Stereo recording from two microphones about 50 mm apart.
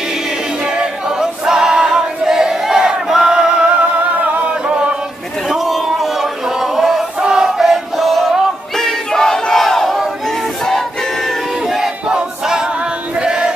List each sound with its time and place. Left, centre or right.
0.7 s choir: centre
2.8 s crowd: centre
4.4 s chant: right
5.5 s choir: centre
8.7 s battle cry: centre
11.6 s battle cry: centre
13.1 s chant: centre